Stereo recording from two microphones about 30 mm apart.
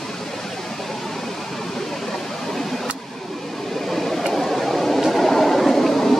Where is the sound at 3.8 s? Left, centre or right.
Centre.